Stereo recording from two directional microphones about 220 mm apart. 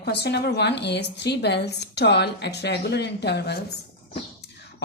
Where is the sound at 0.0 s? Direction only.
50° left (ahead or behind).